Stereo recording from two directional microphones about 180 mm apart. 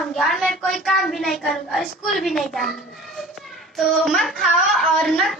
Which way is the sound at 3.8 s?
Centre (ahead or behind).